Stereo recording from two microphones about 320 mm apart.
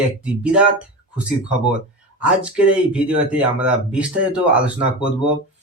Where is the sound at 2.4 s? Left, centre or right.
Centre.